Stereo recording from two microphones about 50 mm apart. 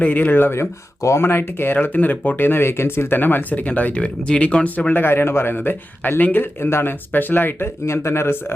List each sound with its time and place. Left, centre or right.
0.0 s speech: left
1.0 s speech: left
1.9 s speech: left
4.9 s speech: left
5.5 s speech: left
7.1 s speech: left
8.0 s speech: left